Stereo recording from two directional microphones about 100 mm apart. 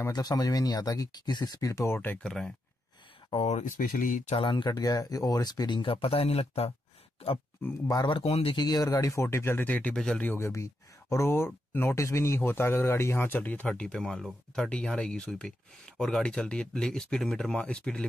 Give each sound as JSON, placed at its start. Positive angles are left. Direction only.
{"t": 0.1, "sound": "speech", "side_deg": 40}
{"t": 2.2, "sound": "speech", "side_deg": 5}
{"t": 3.3, "sound": "speech", "side_deg": 80}
{"t": 4.4, "sound": "speech", "side_deg": 60}
{"t": 4.6, "sound": "speech", "side_deg": 40}
{"t": 7.6, "sound": "speech", "side_deg": 20}
{"t": 8.1, "sound": "speech", "side_deg": 80}
{"t": 8.5, "sound": "speech", "side_deg": 40}
{"t": 10.3, "sound": "speech", "side_deg": 30}